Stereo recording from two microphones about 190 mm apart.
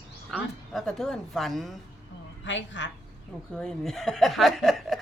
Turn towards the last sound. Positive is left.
turn(degrees=0)  # may be behind; listen again after turning